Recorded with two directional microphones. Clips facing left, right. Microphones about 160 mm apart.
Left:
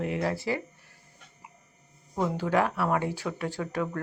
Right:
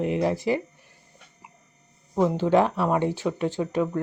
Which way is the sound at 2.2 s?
25° right (ahead or behind).